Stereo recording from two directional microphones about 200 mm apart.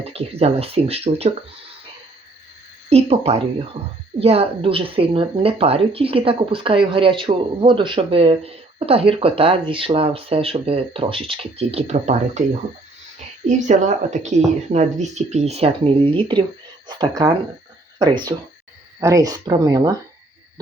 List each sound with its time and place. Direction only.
0.0 s speech: 30° right (ahead or behind)
2.9 s a woman's voice: 30° right (ahead or behind)
18.9 s speech: 15° right (ahead or behind)